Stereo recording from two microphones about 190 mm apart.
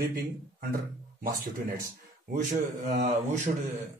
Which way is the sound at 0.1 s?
50° right (ahead or behind).